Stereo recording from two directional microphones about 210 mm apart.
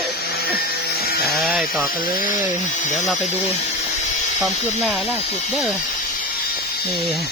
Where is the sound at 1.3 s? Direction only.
Centre (ahead or behind).